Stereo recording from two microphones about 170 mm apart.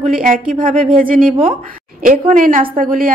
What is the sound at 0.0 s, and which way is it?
A woman's voice, 50° right (ahead or behind).